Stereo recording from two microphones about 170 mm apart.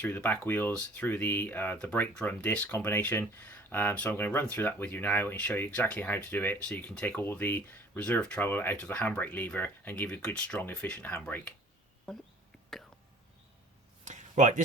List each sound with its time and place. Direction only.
0.0 s speech: 10° left (ahead or behind)
12.7 s whispering: centre (ahead or behind)
14.0 s a sound: 45° right (ahead or behind)